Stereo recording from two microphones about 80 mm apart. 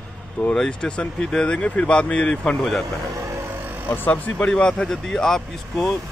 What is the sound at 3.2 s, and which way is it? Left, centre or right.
Vehicle, right.